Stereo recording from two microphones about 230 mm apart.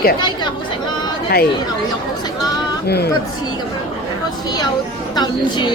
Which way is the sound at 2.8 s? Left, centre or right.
Left.